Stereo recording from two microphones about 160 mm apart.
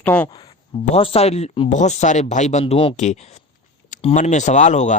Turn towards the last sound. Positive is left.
turn(degrees=50)  # may be behind; listen again after turning